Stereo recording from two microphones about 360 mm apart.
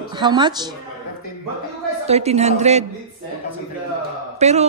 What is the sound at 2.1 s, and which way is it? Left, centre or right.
Speech, centre.